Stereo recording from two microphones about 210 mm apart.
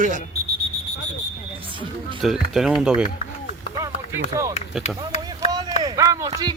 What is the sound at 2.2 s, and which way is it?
Speech, centre (ahead or behind).